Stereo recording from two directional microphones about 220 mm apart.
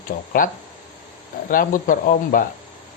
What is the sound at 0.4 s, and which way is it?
Speech, 40° left (ahead or behind).